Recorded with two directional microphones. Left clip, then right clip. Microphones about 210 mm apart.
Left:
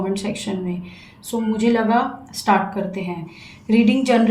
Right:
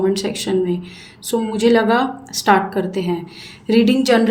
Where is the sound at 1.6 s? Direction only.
40° right (ahead or behind).